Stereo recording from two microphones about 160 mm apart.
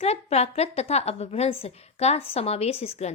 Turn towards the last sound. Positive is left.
turn(degrees=40)  # may be behind; listen again after turning